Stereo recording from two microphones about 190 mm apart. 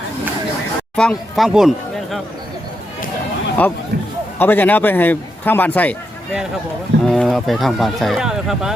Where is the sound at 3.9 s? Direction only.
60° right (ahead or behind).